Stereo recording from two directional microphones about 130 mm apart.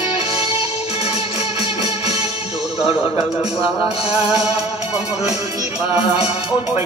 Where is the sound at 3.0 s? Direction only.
50° left (ahead or behind).